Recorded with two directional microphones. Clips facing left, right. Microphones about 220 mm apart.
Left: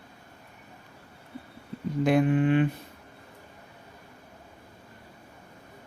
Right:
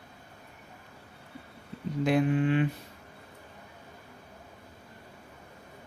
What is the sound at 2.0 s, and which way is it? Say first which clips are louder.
Speech: left 3 dB; 50° left (ahead or behind).